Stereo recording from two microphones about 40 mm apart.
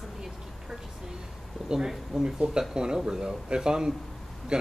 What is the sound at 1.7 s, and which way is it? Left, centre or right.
Speech, centre.